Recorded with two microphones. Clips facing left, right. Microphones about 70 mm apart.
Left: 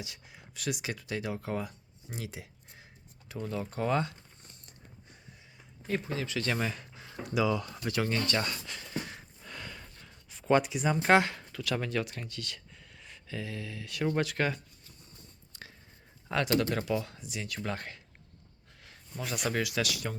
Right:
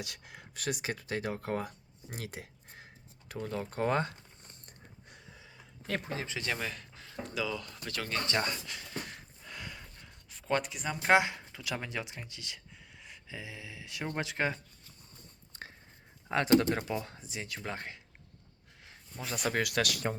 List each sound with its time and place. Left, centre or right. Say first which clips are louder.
0.0 s speech: right 2 dB; right
0.5 s speech: even; right
6.1 s speech: left 3 dB; right
6.6 s speech: left 4 dB; centre
8.2 s speech: left 1 dB; right
8.6 s a sound: left 3 dB; centre
10.3 s speech: left 6 dB; centre; by 14.6 s right
15.5 s writing: right 3 dB; right
16.3 s speech: right 2 dB; right
19.3 s speech: even; right